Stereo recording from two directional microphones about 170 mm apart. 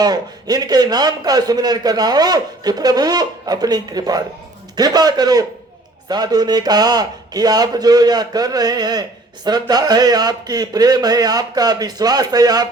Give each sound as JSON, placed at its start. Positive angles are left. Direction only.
{"t": 0.0, "sound": "a man's voice", "side_deg": -25}